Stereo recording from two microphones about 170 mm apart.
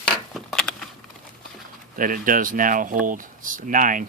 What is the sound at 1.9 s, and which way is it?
Speech, 55° right (ahead or behind).